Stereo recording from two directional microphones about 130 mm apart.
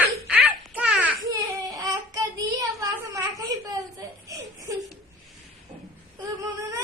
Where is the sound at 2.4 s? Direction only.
25° right (ahead or behind).